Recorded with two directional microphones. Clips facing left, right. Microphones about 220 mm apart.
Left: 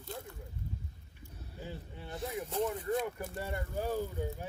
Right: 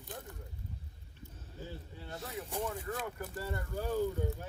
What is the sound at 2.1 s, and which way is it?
Speech, 15° left (ahead or behind).